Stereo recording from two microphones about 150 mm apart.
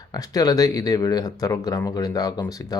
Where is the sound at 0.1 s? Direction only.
25° left (ahead or behind).